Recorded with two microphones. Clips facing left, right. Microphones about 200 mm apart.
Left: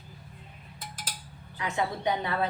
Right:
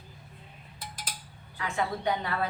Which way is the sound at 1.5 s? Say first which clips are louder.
Left 1 dB; 20° left (ahead or behind).